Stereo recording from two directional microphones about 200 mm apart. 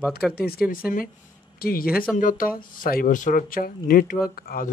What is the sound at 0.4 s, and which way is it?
Speech, 50° left (ahead or behind).